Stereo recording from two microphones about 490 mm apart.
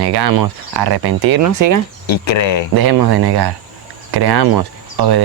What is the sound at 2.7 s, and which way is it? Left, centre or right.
Speech, right.